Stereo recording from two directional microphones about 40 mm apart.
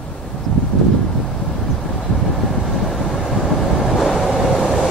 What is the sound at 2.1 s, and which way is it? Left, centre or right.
Vehicle, centre.